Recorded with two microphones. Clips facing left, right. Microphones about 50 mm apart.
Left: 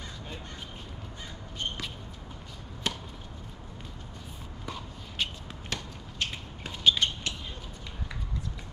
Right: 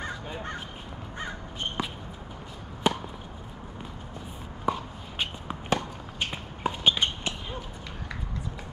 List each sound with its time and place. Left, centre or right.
1.8 s basketball bounce: centre
2.8 s chop: centre
4.6 s a sound: right